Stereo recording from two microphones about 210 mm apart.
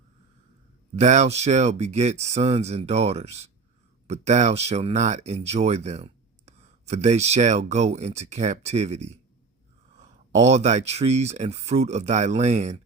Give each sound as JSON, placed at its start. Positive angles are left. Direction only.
{"t": 0.9, "sound": "speech", "side_deg": -35}
{"t": 10.3, "sound": "speech", "side_deg": -30}